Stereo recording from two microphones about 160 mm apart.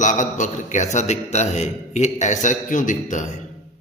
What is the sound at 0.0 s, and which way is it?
A man's voice, 50° left (ahead or behind).